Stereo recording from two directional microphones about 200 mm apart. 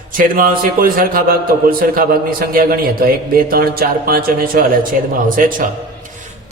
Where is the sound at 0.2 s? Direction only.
45° right (ahead or behind).